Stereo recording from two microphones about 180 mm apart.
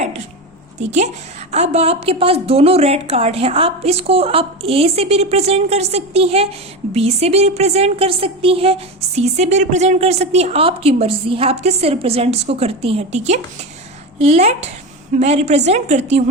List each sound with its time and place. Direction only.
0.8 s a woman's voice: 40° right (ahead or behind)